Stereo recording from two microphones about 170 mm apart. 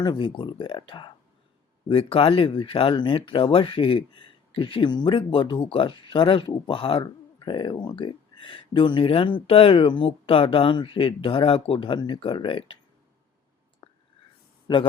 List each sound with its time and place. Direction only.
0.0 s speech: 30° left (ahead or behind)
13.8 s whispering: 30° left (ahead or behind)
14.7 s speech: 25° left (ahead or behind)